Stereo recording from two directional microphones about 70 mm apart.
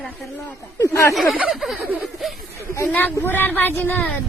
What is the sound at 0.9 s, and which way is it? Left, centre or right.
Speech, left.